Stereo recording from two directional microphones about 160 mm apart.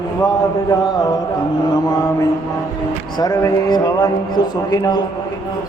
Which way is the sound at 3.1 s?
20° left (ahead or behind).